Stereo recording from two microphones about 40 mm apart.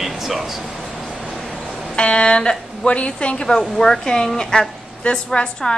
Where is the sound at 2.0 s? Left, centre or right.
Left.